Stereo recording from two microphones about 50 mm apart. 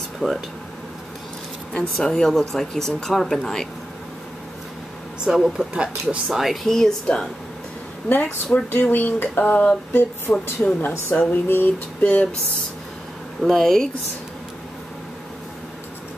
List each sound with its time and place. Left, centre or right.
0.2 s speech: centre
1.7 s speech: left
5.2 s speech: centre
6.3 s speech: centre
6.6 s speech: centre
8.5 s a woman's voice: left
11.1 s speech: left
13.4 s speech: centre